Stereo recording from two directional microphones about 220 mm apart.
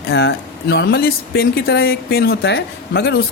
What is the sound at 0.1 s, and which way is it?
Speech, 50° left (ahead or behind).